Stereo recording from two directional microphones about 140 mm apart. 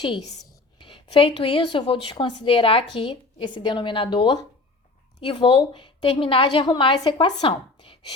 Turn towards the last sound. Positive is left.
turn(degrees=35)  # may be behind; listen again after turning